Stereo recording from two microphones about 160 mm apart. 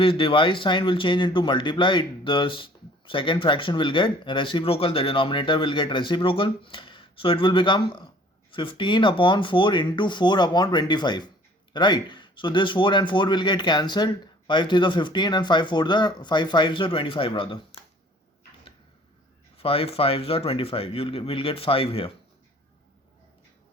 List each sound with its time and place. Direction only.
0.0 s a man's voice: 35° left (ahead or behind)
19.5 s speech: 35° left (ahead or behind)